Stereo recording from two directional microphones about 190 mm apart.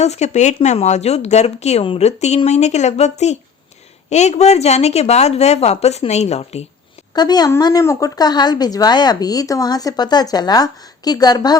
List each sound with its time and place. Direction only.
0.0 s speech: 35° left (ahead or behind)
7.1 s speech: 20° left (ahead or behind)